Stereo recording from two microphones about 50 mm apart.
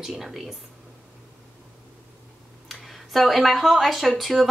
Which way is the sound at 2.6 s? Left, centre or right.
Centre.